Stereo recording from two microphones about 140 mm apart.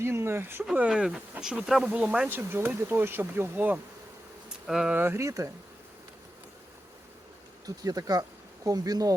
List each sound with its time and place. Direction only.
0.0 s speech: 20° right (ahead or behind)
7.8 s speech: 25° right (ahead or behind)